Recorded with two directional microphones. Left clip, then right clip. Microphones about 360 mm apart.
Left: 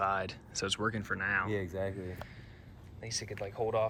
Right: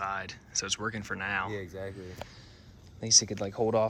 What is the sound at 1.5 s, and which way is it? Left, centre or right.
Speech, left.